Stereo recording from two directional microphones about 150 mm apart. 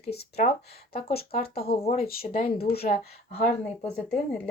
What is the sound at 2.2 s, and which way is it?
Speech, 85° left.